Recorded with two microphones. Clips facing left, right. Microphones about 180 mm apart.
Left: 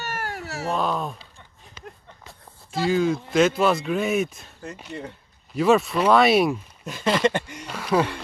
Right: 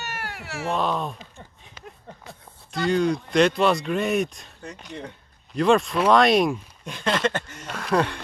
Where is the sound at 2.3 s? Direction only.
Centre (ahead or behind).